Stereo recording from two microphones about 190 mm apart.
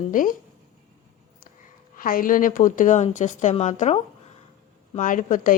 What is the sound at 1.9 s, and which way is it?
A woman's voice, 50° left (ahead or behind).